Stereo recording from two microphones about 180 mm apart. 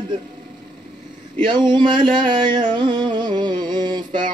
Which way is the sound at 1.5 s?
25° right (ahead or behind).